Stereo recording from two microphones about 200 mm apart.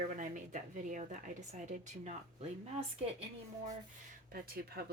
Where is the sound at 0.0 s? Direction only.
40° right (ahead or behind).